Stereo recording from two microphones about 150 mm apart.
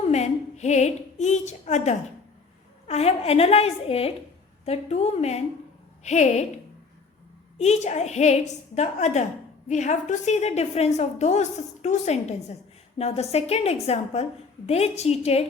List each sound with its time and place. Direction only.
0.1 s a woman's voice: 50° left (ahead or behind)
7.6 s a woman's voice: 50° left (ahead or behind)